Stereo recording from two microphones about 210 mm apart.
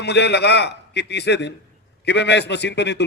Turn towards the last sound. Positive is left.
turn(degrees=55)  # may be behind; listen again after turning